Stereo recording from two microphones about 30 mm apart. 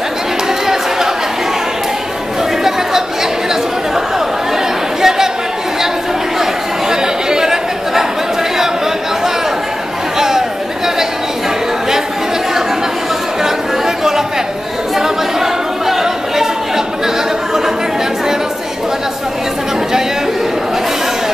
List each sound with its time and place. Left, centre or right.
0.7 s chatter: centre
5.0 s chatter: centre
6.9 s chatter: right
10.1 s chatter: centre
13.4 s chatter: centre